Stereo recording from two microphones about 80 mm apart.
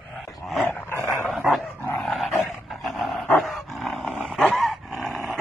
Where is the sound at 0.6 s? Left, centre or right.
Left.